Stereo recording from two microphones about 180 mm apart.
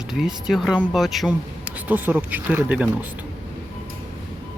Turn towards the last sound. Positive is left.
turn(degrees=-5)  # may be behind; listen again after turning